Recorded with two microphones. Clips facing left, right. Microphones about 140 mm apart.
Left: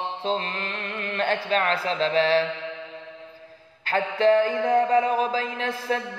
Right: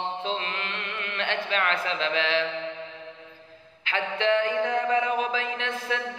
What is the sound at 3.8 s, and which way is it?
Mantra, 40° left (ahead or behind).